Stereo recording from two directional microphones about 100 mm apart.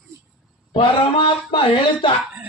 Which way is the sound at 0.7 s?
60° left (ahead or behind).